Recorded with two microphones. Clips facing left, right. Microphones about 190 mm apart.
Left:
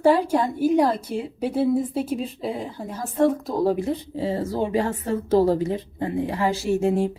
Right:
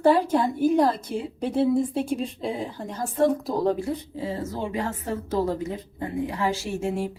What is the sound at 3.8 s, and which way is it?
A woman's voice, 30° left (ahead or behind).